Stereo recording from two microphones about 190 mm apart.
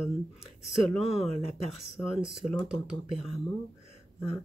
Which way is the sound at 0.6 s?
Centre (ahead or behind).